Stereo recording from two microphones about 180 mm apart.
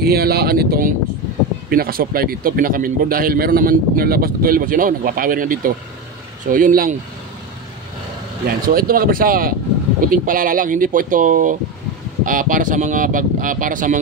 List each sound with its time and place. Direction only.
0.0 s a man's voice: 60° right (ahead or behind)
8.6 s a man's voice: 55° right (ahead or behind)